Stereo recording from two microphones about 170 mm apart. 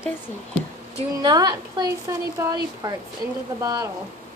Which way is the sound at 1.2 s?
25° right (ahead or behind).